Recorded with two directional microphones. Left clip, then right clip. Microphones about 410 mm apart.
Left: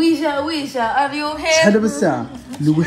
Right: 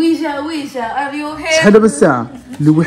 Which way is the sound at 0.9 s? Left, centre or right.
Left.